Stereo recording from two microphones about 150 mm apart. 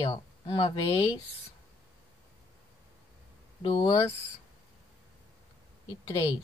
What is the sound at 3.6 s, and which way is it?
Speech, 30° left (ahead or behind).